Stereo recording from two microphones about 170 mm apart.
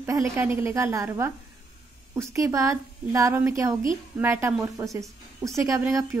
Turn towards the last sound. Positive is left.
turn(degrees=-20)  # may be behind; listen again after turning